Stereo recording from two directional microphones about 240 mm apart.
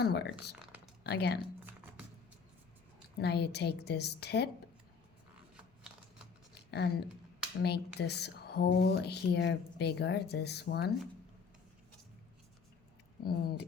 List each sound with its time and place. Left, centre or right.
0.0 s speech: left
3.2 s speech: left
6.7 s speech: left
13.2 s speech: left